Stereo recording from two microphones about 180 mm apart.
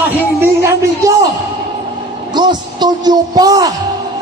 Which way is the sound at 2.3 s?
25° right (ahead or behind).